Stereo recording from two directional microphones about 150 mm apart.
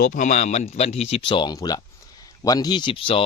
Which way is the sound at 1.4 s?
25° left (ahead or behind).